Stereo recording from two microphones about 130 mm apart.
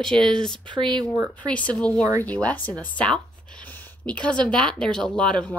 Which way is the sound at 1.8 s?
10° left (ahead or behind).